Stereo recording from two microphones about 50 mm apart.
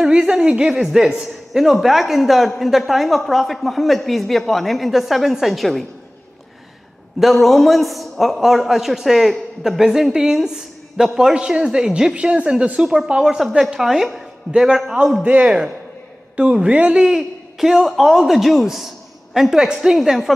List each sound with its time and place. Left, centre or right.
0.1 s a woman's voice: centre
7.2 s a woman's voice: centre
12.8 s a woman's voice: centre
13.7 s a woman's voice: centre
17.6 s a woman's voice: centre